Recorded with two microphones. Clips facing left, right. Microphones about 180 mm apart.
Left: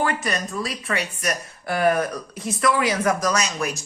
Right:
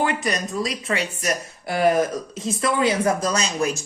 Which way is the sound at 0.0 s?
20° right (ahead or behind).